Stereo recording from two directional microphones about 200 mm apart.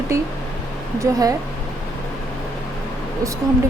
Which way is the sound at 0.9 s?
15° right (ahead or behind).